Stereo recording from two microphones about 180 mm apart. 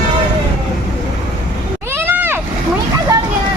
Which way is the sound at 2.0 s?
10° right (ahead or behind).